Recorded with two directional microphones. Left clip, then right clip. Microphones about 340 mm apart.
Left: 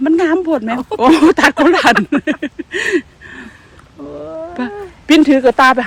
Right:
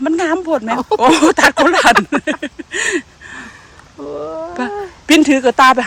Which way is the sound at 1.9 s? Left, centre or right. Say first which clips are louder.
Right 1 dB; right.